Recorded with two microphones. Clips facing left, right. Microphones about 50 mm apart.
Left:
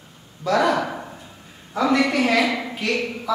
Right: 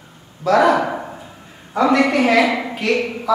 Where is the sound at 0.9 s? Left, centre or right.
Centre.